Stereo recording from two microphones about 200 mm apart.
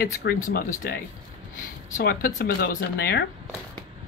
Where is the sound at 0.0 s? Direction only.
50° left (ahead or behind).